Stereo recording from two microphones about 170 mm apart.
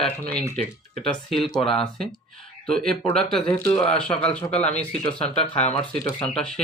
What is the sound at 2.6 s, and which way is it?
Speech, 5° left (ahead or behind).